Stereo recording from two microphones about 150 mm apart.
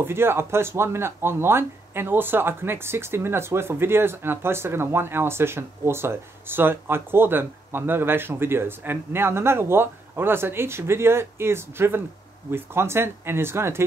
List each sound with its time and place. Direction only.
0.0 s speech: 15° right (ahead or behind)